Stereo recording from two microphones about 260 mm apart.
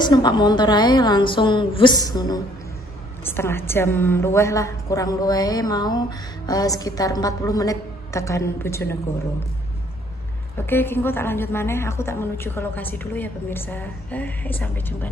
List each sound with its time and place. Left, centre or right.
0.0 s a woman's voice: centre
10.7 s a woman's voice: centre